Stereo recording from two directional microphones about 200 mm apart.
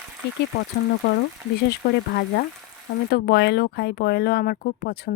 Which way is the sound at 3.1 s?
55° left (ahead or behind).